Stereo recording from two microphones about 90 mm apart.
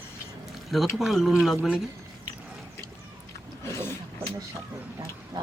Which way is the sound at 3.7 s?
30° left (ahead or behind).